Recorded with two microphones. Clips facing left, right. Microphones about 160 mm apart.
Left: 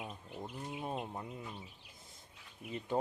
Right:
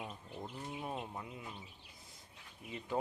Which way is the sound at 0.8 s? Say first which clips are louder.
Left 3 dB; 15° left (ahead or behind).